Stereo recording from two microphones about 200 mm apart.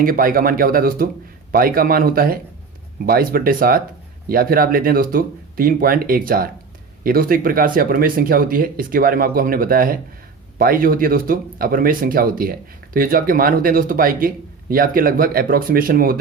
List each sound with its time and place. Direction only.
0.0 s speech: 45° right (ahead or behind)